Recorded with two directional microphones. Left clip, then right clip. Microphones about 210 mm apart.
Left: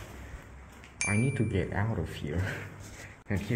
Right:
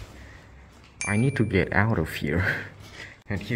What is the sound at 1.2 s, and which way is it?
Speech, 35° right (ahead or behind).